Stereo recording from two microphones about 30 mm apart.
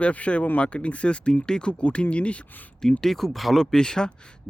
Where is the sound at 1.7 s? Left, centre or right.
Left.